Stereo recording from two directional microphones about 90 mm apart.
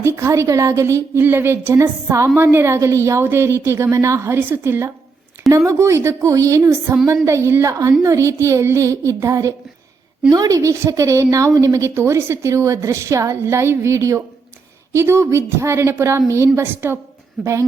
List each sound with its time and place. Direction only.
0.0 s a woman's voice: 30° right (ahead or behind)
17.4 s a woman's voice: centre (ahead or behind)